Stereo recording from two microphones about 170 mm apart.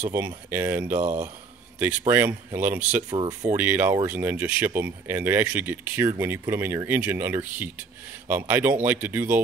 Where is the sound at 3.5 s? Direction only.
10° right (ahead or behind).